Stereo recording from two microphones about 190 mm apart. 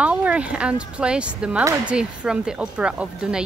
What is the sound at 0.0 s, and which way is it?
Speech, 5° right (ahead or behind).